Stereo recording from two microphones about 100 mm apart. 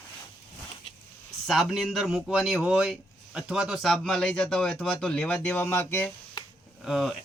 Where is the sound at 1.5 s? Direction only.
Centre (ahead or behind); by 6.1 s 20° left (ahead or behind).